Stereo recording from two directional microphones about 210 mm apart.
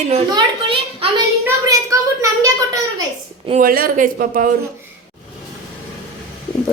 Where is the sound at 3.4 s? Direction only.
40° right (ahead or behind).